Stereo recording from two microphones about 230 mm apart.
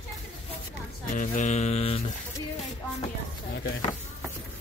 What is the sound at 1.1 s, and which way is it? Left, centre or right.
Music, left.